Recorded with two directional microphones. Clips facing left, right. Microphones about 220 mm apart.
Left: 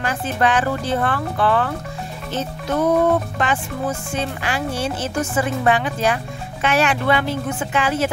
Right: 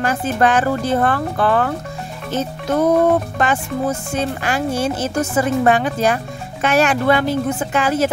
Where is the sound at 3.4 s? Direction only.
45° right (ahead or behind).